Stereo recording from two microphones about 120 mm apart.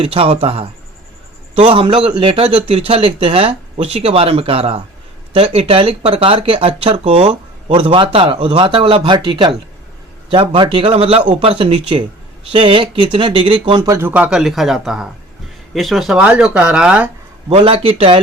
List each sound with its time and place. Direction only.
0.0 s speech: 55° right (ahead or behind)
13.8 s speech: 25° right (ahead or behind)
14.1 s speech: 10° right (ahead or behind)
17.5 s speech: 50° right (ahead or behind)